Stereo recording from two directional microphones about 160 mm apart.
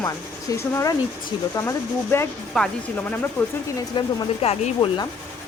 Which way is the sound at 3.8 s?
25° left (ahead or behind).